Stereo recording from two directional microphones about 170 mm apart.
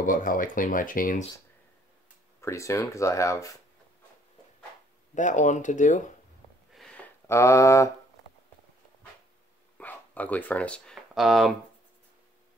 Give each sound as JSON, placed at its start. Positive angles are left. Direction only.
{"t": 0.0, "sound": "speech", "side_deg": 55}
{"t": 2.4, "sound": "speech", "side_deg": 15}
{"t": 5.1, "sound": "speech", "side_deg": 45}
{"t": 6.7, "sound": "a sound", "side_deg": 5}
{"t": 7.2, "sound": "speech", "side_deg": 15}
{"t": 9.8, "sound": "speech", "side_deg": 10}